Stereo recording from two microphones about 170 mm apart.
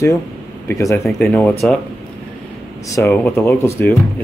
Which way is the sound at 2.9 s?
15° left (ahead or behind).